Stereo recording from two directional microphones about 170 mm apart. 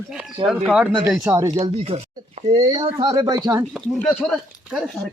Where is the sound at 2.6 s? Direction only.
25° right (ahead or behind).